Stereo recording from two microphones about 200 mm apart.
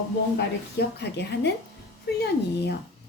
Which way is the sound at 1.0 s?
55° left (ahead or behind).